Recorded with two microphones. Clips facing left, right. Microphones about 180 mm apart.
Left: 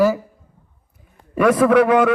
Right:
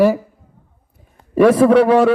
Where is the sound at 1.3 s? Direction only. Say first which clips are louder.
Right 3 dB; 30° right (ahead or behind).